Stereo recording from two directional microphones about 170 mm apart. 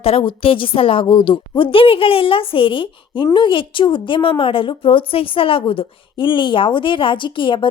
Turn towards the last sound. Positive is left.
turn(degrees=30)  # may be behind; listen again after turning